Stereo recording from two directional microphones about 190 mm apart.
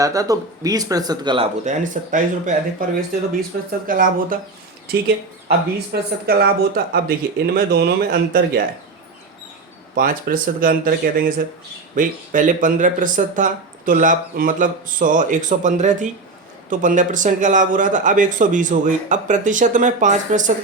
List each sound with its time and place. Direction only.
0.0 s speech: 20° right (ahead or behind)
1.6 s a man's voice: 40° right (ahead or behind)
3.8 s speech: 45° right (ahead or behind)
4.9 s speech: 55° right (ahead or behind)
9.9 s a man's voice: 50° right (ahead or behind)